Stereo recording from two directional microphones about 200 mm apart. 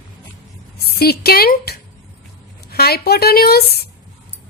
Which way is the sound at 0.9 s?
50° left (ahead or behind).